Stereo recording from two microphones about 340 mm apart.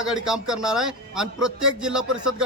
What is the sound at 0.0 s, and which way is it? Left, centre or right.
A man's voice, centre.